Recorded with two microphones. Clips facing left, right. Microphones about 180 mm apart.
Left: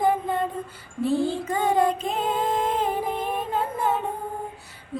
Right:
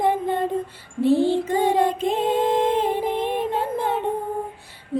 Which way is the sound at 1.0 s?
30° right (ahead or behind).